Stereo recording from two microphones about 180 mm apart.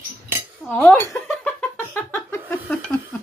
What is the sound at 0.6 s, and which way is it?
Speech, 5° left (ahead or behind).